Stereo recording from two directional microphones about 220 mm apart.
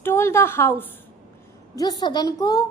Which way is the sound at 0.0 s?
10° left (ahead or behind).